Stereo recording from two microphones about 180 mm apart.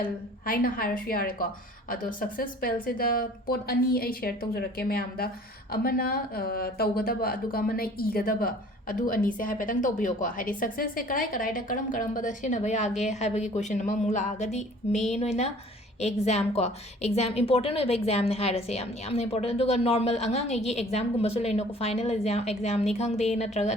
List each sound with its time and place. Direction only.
0.0 s a woman's voice: 55° left (ahead or behind); by 23.7 s 40° left (ahead or behind)